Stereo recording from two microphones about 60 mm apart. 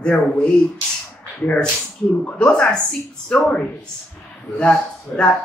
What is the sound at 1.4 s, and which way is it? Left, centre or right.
Speech, left.